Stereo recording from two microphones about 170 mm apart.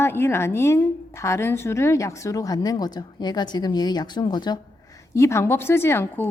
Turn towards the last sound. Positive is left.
turn(degrees=15)  # may be behind; listen again after turning